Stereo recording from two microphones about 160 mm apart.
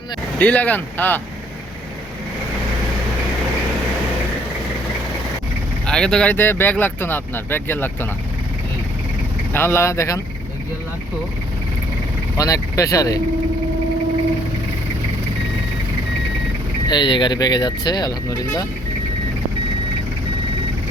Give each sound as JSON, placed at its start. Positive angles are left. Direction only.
{"t": 0.3, "sound": "speech", "side_deg": 10}
{"t": 5.8, "sound": "speech", "side_deg": 5}
{"t": 9.5, "sound": "speech", "side_deg": 15}
{"t": 12.4, "sound": "speech", "side_deg": 20}
{"t": 16.9, "sound": "speech", "side_deg": 30}